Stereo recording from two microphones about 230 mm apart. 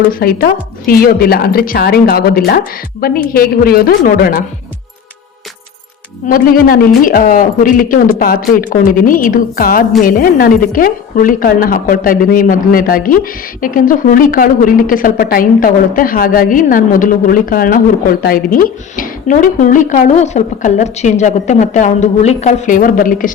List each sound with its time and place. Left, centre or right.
0.1 s a woman's voice: left
6.2 s a woman's voice: left